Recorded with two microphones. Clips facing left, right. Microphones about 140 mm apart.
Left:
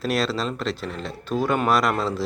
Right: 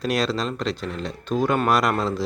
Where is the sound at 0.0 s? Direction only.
Centre (ahead or behind).